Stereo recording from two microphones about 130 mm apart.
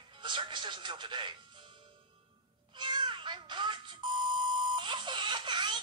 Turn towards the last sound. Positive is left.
turn(degrees=-35)  # may be behind; listen again after turning